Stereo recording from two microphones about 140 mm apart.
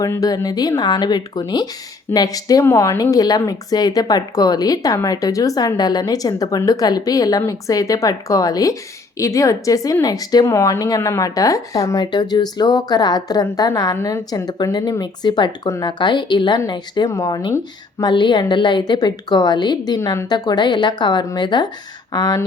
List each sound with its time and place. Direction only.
0.0 s a woman's voice: 25° left (ahead or behind)
20.0 s speech: 20° left (ahead or behind)
20.3 s a woman's voice: 30° left (ahead or behind)